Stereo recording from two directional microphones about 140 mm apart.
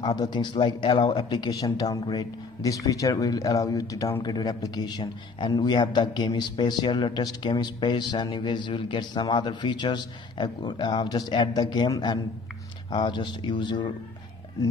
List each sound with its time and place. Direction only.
0.0 s speech: 30° left (ahead or behind)